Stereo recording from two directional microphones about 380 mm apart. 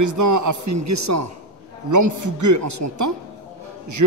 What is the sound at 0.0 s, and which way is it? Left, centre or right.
A man's voice, right.